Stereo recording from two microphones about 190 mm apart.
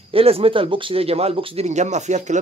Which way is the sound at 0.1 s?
30° right (ahead or behind).